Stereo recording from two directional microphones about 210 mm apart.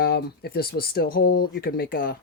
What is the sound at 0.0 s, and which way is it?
Speech, 50° left (ahead or behind).